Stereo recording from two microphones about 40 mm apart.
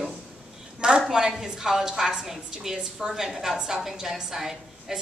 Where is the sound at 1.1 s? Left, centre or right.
Centre.